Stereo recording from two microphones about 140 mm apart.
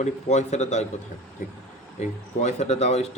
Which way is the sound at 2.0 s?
55° left (ahead or behind).